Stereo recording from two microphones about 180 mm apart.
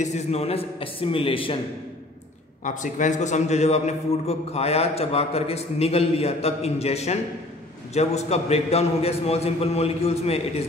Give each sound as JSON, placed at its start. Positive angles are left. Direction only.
{"t": 0.0, "sound": "a man's voice", "side_deg": 40}
{"t": 2.6, "sound": "a man's voice", "side_deg": 45}